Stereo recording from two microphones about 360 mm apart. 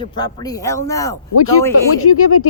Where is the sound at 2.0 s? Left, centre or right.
Left.